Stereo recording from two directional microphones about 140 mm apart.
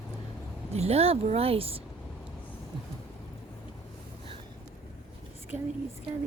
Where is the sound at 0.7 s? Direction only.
50° right (ahead or behind).